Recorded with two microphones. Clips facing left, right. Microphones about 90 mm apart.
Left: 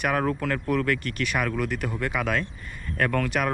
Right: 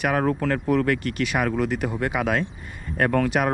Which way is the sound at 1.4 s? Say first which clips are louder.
Right 4 dB; 40° right (ahead or behind).